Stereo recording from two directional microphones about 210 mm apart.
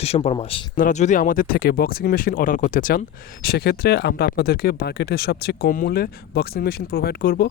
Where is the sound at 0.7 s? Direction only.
35° left (ahead or behind).